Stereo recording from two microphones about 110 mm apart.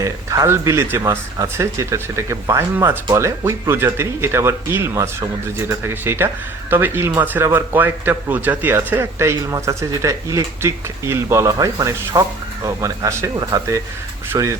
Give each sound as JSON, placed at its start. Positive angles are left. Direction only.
{"t": 0.0, "sound": "speech", "side_deg": -30}